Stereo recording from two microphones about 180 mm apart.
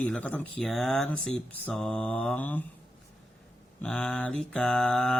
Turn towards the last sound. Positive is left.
turn(degrees=5)  # may be behind; listen again after turning